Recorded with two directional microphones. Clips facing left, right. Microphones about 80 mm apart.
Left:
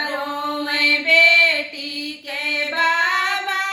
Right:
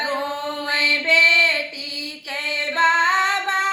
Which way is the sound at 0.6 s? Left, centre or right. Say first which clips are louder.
Right 2 dB; right.